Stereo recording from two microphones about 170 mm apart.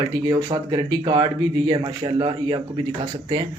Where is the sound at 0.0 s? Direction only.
25° right (ahead or behind).